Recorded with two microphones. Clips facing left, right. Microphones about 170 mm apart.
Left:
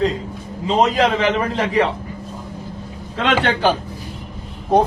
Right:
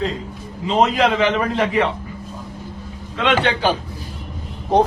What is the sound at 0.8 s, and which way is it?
A man's voice, 40° left (ahead or behind).